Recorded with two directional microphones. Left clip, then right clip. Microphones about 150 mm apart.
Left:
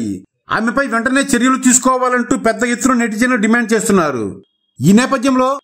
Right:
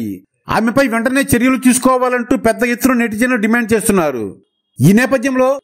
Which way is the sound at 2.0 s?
30° right (ahead or behind).